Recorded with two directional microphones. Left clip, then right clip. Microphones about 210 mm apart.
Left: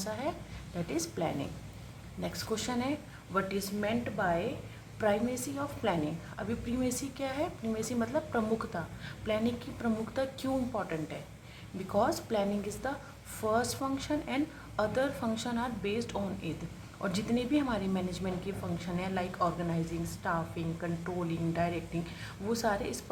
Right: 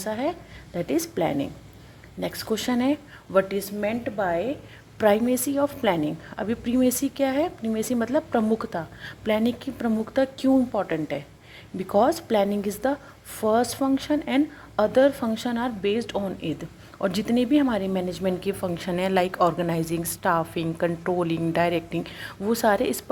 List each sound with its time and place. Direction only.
0.0 s a woman's voice: 30° right (ahead or behind)